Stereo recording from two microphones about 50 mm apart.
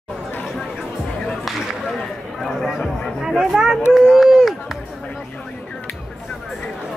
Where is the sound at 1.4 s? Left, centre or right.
Centre.